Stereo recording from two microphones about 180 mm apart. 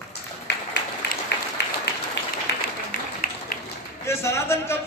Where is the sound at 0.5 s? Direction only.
75° left (ahead or behind).